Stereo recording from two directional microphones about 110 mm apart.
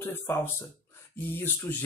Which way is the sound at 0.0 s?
20° left (ahead or behind).